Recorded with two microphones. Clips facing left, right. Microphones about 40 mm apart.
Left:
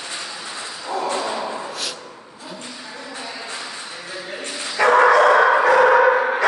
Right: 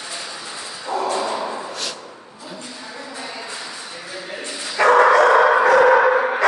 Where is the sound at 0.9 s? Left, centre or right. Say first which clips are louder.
Right 2 dB; centre.